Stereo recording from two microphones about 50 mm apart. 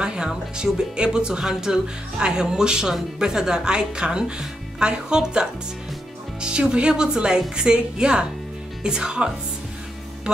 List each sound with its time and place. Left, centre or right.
0.0 s speech: centre